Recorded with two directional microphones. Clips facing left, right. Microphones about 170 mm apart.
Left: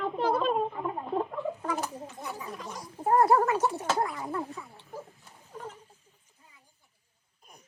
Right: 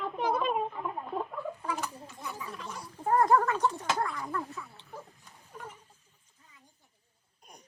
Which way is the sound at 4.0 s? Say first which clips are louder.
Left 3 dB; 25° left (ahead or behind).